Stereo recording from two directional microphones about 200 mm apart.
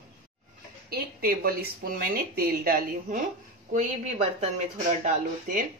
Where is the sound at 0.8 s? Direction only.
50° right (ahead or behind).